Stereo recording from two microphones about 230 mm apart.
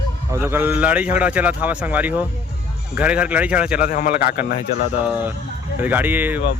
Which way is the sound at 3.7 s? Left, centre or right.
Left.